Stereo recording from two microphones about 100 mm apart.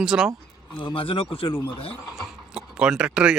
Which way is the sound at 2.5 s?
5° right (ahead or behind).